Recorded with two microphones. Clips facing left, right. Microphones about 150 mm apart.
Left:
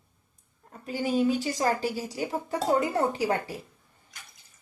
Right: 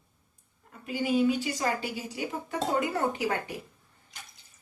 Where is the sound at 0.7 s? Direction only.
40° left (ahead or behind).